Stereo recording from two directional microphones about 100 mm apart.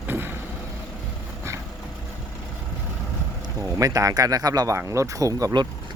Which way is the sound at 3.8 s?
35° right (ahead or behind).